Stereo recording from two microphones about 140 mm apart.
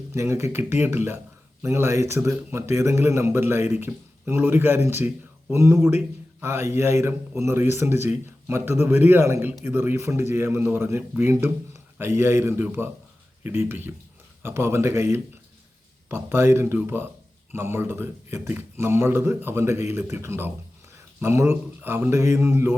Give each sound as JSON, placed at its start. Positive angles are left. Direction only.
{"t": 0.1, "sound": "a man's voice", "side_deg": -20}